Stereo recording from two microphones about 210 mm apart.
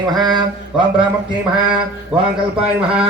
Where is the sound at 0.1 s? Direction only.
20° right (ahead or behind).